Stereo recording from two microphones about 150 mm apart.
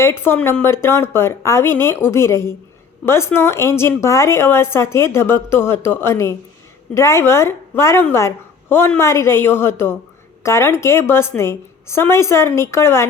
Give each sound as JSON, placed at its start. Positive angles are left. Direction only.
{"t": 0.0, "sound": "a woman's voice", "side_deg": 15}